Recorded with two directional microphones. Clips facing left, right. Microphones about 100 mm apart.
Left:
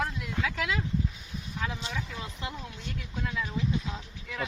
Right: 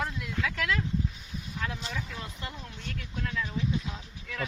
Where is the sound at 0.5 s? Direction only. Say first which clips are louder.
Right 2 dB; 15° left (ahead or behind).